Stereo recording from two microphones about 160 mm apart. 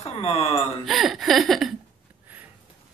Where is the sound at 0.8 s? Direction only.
Centre (ahead or behind).